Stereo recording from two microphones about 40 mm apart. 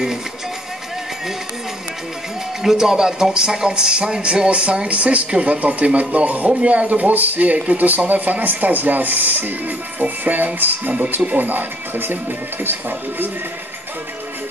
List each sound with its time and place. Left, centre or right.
2.6 s a man's voice: centre; by 12.2 s right